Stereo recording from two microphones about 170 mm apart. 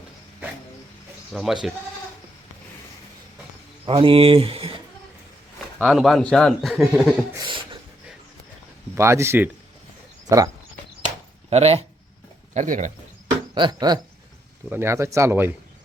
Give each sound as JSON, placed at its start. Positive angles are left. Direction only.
{"t": 1.3, "sound": "speech", "side_deg": 0}
{"t": 3.8, "sound": "speech", "side_deg": -35}
{"t": 5.8, "sound": "speech", "side_deg": 0}
{"t": 7.3, "sound": "a sound", "side_deg": -30}
{"t": 9.0, "sound": "speech", "side_deg": -15}
{"t": 11.0, "sound": "chop", "side_deg": -40}
{"t": 12.5, "sound": "speech", "side_deg": -50}
{"t": 13.5, "sound": "speech", "side_deg": -25}